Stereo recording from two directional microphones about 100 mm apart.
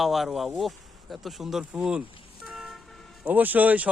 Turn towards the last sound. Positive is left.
turn(degrees=-15)  # may be behind; listen again after turning